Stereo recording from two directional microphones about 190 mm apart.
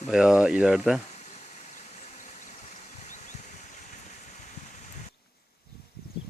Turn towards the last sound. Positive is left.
turn(degrees=35)  # may be behind; listen again after turning